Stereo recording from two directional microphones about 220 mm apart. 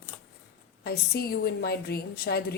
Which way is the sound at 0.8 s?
45° left (ahead or behind).